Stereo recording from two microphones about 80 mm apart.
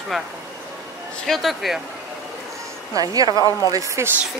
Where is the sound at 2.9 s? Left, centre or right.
Right.